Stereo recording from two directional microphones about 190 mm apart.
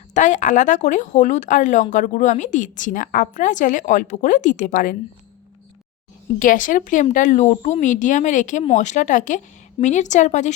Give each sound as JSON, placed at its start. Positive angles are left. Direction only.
{"t": 0.1, "sound": "speech", "side_deg": 40}
{"t": 6.4, "sound": "speech", "side_deg": 45}